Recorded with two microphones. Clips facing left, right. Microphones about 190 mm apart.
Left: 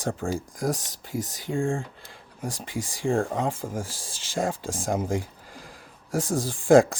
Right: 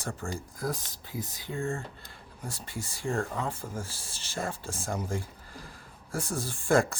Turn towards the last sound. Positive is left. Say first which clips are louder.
# left 8 dB
turn(degrees=90)